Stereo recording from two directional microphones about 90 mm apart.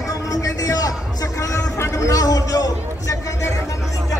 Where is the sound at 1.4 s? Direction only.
35° left (ahead or behind).